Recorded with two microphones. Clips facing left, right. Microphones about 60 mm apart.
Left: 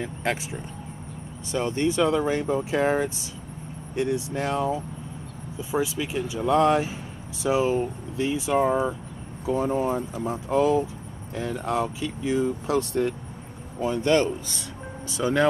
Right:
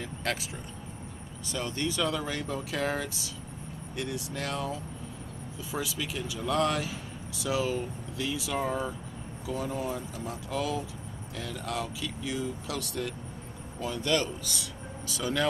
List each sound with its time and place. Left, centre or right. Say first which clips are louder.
0.0 s speech: left 5 dB; left